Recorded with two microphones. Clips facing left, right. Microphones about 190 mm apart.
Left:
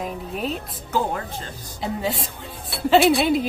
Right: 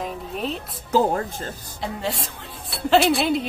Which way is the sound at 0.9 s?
40° right (ahead or behind).